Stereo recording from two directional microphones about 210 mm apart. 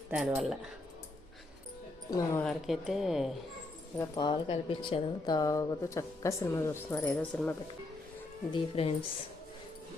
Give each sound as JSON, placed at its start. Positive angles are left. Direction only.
{"t": 0.1, "sound": "speech", "side_deg": -5}
{"t": 2.0, "sound": "a woman's voice", "side_deg": 15}
{"t": 2.4, "sound": "speech", "side_deg": 0}
{"t": 3.9, "sound": "a woman's voice", "side_deg": 15}
{"t": 8.5, "sound": "speech", "side_deg": 25}